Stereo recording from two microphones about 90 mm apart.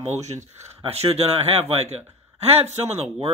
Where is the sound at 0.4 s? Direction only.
30° right (ahead or behind).